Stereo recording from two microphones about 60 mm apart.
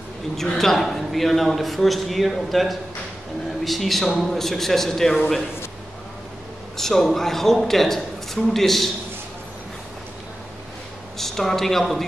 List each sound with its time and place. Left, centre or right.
0.4 s a man's voice: centre
6.8 s a man's voice: centre
11.1 s speech: centre